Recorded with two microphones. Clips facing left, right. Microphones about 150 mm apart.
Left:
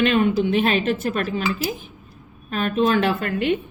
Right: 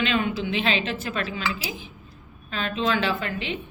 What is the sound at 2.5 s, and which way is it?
A woman's voice, 50° left (ahead or behind).